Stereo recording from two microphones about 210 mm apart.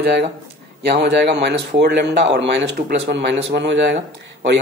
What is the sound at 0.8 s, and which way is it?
A man's voice, 55° right (ahead or behind).